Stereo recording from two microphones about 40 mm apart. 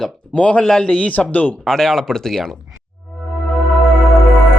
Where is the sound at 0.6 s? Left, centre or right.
Centre.